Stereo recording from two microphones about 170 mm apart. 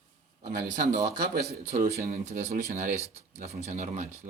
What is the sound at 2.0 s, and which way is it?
A man's voice, 40° right (ahead or behind).